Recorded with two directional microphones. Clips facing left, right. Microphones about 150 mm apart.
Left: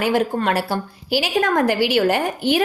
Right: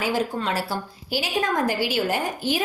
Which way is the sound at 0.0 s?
60° left (ahead or behind).